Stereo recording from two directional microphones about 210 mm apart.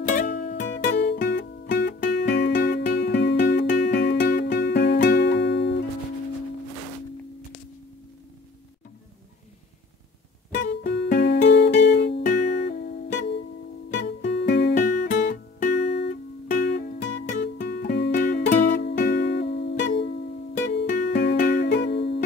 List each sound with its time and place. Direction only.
0.1 s music: 45° left (ahead or behind)
10.5 s music: 55° left (ahead or behind)
15.1 s music: 40° left (ahead or behind); by 22.2 s 55° left (ahead or behind)